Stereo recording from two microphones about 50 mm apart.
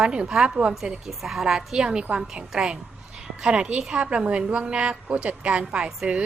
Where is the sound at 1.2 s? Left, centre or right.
Centre; by 5.9 s right.